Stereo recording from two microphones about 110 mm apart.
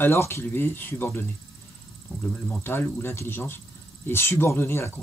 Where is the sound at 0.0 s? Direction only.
25° left (ahead or behind).